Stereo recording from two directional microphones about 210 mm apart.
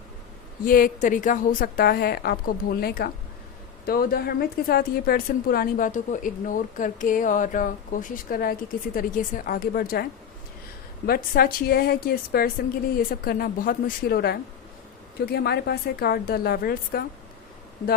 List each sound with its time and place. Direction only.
0.6 s a woman's voice: 40° left (ahead or behind)